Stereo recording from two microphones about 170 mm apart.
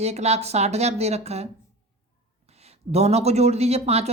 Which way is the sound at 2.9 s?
40° right (ahead or behind).